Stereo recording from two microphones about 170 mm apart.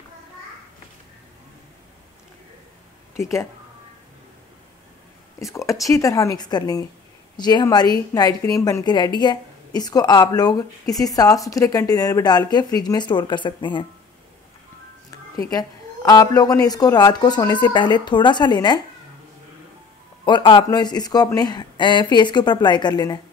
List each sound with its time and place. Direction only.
3.2 s speech: 15° left (ahead or behind)
5.4 s a woman's voice: 20° left (ahead or behind)
15.5 s a woman's voice: 20° left (ahead or behind)
20.2 s a woman's voice: 25° left (ahead or behind)